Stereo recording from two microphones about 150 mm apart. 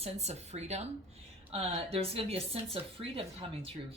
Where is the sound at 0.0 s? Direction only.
45° right (ahead or behind).